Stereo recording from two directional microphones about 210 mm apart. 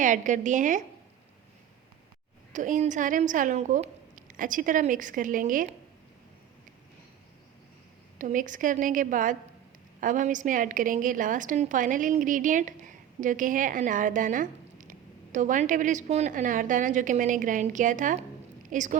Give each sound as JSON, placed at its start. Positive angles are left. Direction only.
{"t": 0.0, "sound": "a woman's voice", "side_deg": -35}
{"t": 2.5, "sound": "a woman's voice", "side_deg": -35}
{"t": 8.2, "sound": "a woman's voice", "side_deg": -40}